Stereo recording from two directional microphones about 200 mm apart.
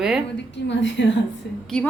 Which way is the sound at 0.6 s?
60° left (ahead or behind).